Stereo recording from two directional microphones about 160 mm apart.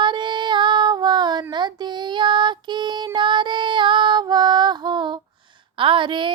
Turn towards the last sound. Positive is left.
turn(degrees=-30)  # may be behind; listen again after turning